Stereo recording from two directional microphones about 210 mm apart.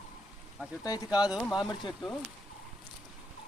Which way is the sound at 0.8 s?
15° left (ahead or behind).